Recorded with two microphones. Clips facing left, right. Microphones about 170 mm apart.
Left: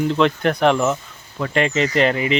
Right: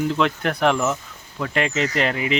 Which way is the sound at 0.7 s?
10° left (ahead or behind).